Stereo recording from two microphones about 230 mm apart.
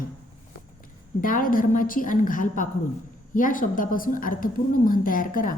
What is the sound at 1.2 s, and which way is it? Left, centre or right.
A woman's voice, left.